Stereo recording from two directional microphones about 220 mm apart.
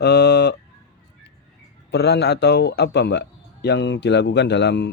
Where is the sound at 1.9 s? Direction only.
50° left (ahead or behind).